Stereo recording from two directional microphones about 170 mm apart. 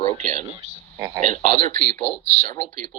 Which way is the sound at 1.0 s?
20° right (ahead or behind).